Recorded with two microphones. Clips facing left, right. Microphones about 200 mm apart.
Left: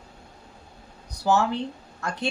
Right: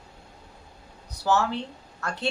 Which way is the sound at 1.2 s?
15° left (ahead or behind).